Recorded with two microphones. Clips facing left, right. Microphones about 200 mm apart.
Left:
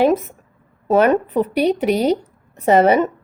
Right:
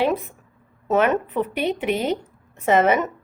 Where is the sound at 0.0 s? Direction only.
40° left (ahead or behind).